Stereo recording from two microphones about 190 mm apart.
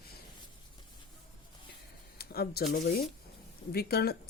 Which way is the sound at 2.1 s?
55° left (ahead or behind).